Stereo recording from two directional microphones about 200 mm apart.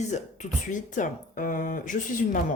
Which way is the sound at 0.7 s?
40° left (ahead or behind).